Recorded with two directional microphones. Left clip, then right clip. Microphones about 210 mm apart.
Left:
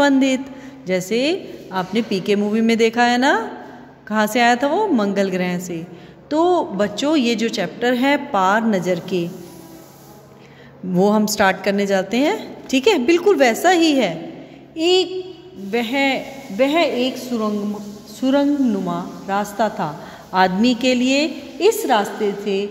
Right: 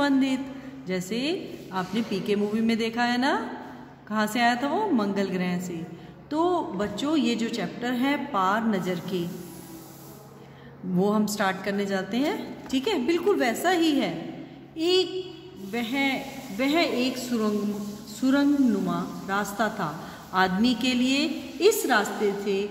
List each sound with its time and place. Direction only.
0.0 s a woman's voice: 30° left (ahead or behind)
11.0 s a woman's voice: 30° left (ahead or behind)